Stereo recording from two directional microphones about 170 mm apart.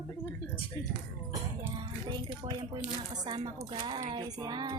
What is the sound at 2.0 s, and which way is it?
A woman's voice, 25° right (ahead or behind).